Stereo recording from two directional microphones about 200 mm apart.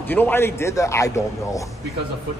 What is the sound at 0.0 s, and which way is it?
A man's voice, 10° left (ahead or behind).